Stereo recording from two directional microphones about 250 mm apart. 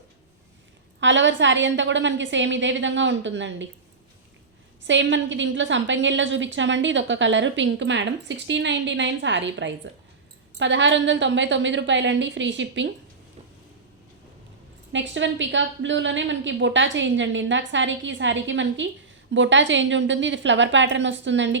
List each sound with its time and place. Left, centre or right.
0.9 s a woman's voice: right
4.8 s a woman's voice: right
14.9 s a woman's voice: right